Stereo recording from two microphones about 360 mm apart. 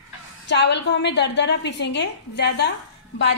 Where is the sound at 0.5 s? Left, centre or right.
Left.